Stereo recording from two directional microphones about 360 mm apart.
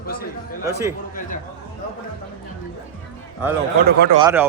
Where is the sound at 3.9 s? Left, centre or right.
Right.